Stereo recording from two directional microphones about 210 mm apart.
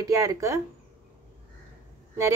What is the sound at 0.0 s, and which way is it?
Speech, 15° right (ahead or behind).